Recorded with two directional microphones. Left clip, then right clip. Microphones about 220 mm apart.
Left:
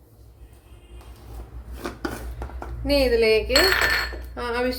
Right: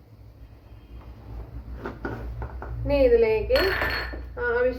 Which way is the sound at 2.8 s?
50° left (ahead or behind).